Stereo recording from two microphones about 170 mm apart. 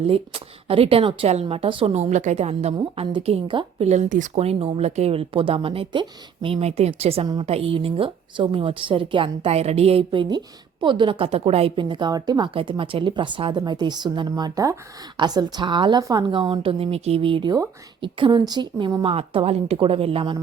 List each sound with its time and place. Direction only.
0.1 s speech: 35° right (ahead or behind)
3.8 s a woman's voice: 45° right (ahead or behind)